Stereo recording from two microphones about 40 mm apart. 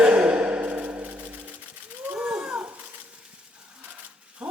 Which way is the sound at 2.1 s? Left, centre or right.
Right.